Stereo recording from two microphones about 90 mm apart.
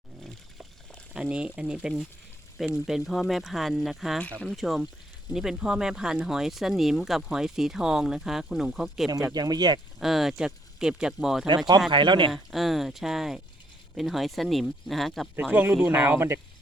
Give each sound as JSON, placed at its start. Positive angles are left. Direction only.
{"t": 1.1, "sound": "speech", "side_deg": -10}
{"t": 4.2, "sound": "speech", "side_deg": 15}
{"t": 4.4, "sound": "speech", "side_deg": 0}
{"t": 9.3, "sound": "speech", "side_deg": -50}
{"t": 10.0, "sound": "speech", "side_deg": -5}
{"t": 11.9, "sound": "speech", "side_deg": -65}
{"t": 12.3, "sound": "speech", "side_deg": 0}
{"t": 15.4, "sound": "speech", "side_deg": -20}